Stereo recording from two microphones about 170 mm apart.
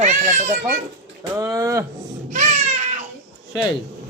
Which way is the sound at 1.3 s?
20° right (ahead or behind).